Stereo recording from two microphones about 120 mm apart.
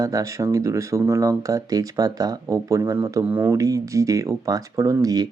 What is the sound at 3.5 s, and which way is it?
Speech, 25° right (ahead or behind).